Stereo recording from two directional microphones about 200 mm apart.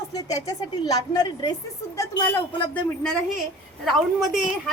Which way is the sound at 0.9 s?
20° left (ahead or behind).